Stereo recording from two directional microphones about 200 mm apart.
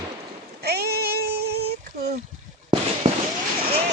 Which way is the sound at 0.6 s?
55° right (ahead or behind).